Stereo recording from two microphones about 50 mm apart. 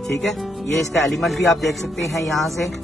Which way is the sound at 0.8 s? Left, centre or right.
Centre.